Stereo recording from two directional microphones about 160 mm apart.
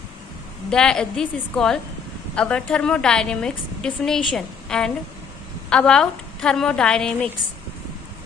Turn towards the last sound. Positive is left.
turn(degrees=5)  # may be behind; listen again after turning